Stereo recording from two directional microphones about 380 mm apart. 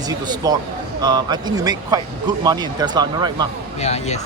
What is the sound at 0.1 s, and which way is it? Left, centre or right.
Speech, centre.